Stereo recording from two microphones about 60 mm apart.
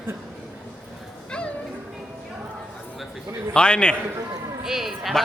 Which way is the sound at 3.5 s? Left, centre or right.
Centre.